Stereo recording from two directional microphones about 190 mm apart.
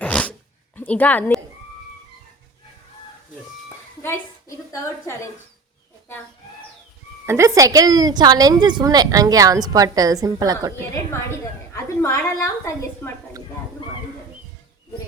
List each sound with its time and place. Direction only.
0.0 s sneeze: 5° left (ahead or behind)
0.8 s a woman's voice: 10° left (ahead or behind)
4.0 s a woman's voice: 15° left (ahead or behind)
7.3 s a woman's voice: 15° right (ahead or behind)
11.7 s a woman's voice: 15° left (ahead or behind)